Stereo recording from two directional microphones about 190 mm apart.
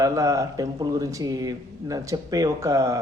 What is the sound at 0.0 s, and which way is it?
A man's voice, 15° right (ahead or behind).